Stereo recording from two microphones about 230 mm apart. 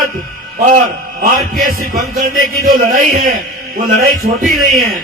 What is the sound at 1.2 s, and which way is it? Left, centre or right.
A man's voice, right.